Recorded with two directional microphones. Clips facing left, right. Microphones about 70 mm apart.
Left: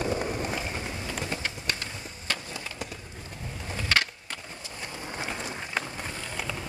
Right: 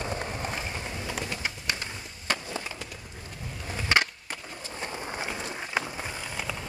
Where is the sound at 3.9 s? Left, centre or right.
Right.